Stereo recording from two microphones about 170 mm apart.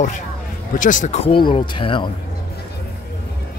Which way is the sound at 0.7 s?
50° left (ahead or behind).